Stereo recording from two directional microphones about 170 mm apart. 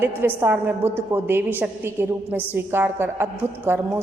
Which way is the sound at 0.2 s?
10° right (ahead or behind).